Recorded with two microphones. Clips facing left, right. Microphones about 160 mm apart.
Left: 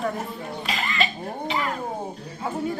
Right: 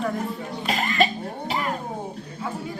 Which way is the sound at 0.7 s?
45° right (ahead or behind).